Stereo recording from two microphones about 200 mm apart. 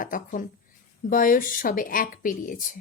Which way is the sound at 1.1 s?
45° left (ahead or behind).